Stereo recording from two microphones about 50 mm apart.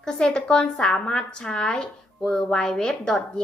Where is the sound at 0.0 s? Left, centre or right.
Centre.